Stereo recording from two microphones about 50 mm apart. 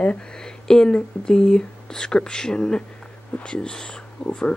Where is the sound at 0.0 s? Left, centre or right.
Centre.